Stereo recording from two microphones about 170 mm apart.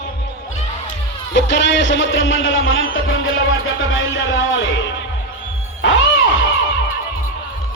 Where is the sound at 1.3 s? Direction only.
90° left.